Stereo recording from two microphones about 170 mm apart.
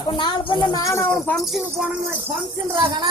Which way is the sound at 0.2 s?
25° left (ahead or behind).